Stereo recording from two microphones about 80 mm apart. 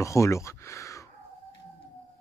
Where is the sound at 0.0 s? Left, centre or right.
Left.